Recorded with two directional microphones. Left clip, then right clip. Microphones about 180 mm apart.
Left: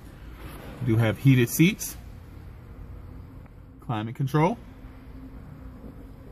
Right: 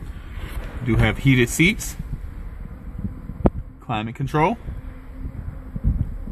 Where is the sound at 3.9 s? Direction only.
30° right (ahead or behind).